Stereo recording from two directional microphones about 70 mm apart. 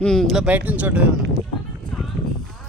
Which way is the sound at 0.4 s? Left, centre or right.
Right.